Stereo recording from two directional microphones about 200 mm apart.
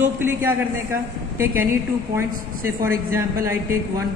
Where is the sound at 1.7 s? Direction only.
15° right (ahead or behind).